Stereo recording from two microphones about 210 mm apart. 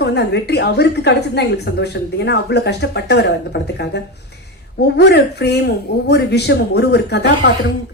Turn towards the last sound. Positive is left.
turn(degrees=50)  # may be behind; listen again after turning